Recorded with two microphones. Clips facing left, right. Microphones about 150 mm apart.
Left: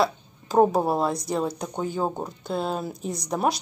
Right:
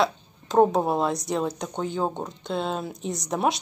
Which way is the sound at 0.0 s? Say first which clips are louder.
Even; 5° left (ahead or behind).